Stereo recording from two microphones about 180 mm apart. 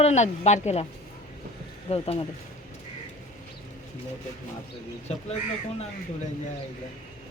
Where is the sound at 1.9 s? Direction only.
35° left (ahead or behind).